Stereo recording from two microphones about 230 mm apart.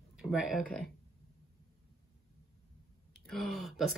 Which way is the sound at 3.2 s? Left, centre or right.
Centre.